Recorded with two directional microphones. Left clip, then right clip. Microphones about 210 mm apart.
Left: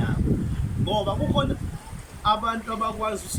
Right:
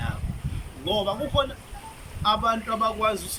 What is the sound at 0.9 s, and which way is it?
Speech, 5° left (ahead or behind).